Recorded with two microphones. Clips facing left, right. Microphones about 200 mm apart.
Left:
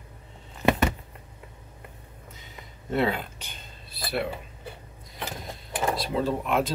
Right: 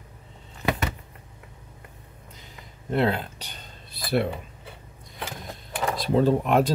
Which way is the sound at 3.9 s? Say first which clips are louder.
Right 5 dB; 50° right (ahead or behind).